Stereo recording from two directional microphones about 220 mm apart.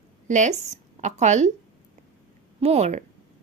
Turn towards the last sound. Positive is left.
turn(degrees=-30)  # may be behind; listen again after turning